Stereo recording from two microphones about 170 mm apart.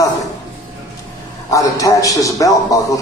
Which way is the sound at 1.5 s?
20° left (ahead or behind).